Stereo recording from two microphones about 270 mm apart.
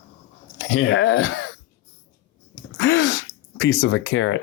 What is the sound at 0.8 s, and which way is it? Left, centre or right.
Speech, left.